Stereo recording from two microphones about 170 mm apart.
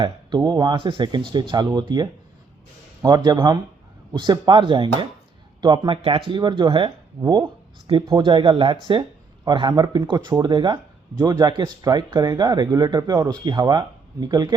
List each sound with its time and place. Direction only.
0.0 s speech: 25° right (ahead or behind)